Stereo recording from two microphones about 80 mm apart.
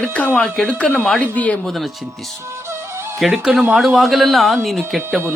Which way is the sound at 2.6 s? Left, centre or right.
Right.